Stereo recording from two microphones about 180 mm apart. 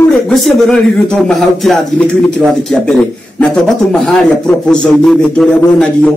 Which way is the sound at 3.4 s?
Centre (ahead or behind).